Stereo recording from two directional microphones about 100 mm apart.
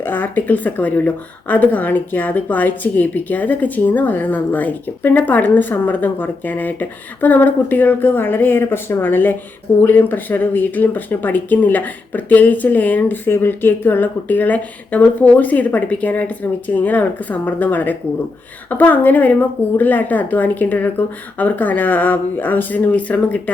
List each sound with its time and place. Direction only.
0.0 s speech: 20° left (ahead or behind)